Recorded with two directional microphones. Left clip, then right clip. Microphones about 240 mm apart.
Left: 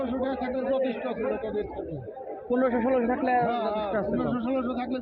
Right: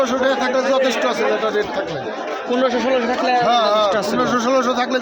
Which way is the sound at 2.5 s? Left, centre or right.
Centre.